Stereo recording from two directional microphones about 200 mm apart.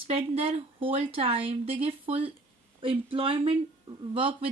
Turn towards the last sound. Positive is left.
turn(degrees=-25)  # may be behind; listen again after turning